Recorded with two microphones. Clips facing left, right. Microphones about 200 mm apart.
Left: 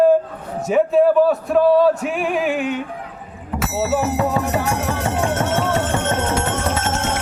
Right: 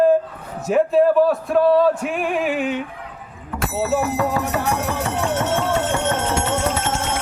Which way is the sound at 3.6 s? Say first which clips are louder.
Left 1 dB; 5° left (ahead or behind).